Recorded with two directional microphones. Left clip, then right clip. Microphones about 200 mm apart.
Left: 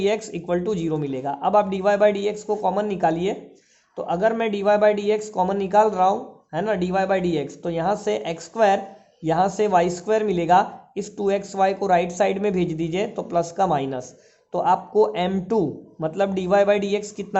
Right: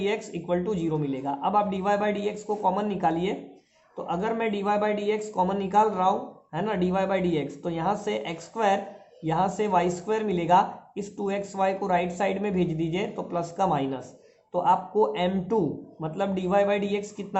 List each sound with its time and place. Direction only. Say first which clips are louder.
0.0 s a man's voice: left 6 dB; 40° left (ahead or behind)